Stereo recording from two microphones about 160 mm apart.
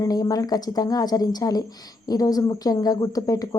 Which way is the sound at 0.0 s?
25° left (ahead or behind).